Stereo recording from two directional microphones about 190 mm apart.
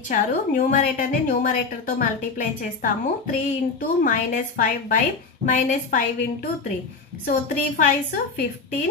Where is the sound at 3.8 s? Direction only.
45° left (ahead or behind).